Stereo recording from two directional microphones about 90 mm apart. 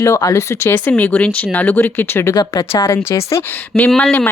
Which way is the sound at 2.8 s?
30° left (ahead or behind).